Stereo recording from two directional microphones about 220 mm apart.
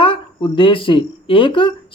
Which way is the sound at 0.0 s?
25° left (ahead or behind).